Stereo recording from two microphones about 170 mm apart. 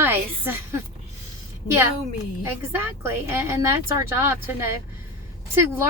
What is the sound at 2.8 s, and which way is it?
Speech, 15° right (ahead or behind).